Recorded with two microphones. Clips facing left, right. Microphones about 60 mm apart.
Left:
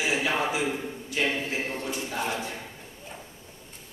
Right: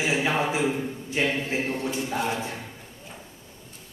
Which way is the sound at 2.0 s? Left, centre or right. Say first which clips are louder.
Right 3 dB; centre.